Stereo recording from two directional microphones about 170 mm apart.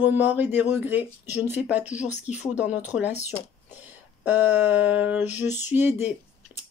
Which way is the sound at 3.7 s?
10° right (ahead or behind).